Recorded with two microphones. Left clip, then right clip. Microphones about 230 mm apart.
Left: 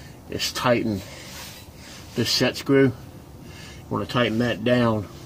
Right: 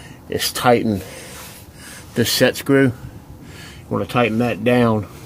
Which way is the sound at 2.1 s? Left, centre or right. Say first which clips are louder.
Right 6 dB; right.